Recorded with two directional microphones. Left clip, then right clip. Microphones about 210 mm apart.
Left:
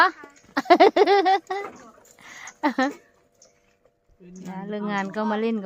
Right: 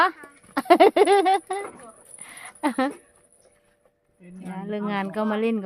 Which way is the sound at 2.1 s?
Centre (ahead or behind).